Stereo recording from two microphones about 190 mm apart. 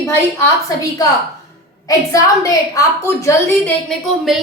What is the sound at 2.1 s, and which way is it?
A woman's voice, 15° left (ahead or behind).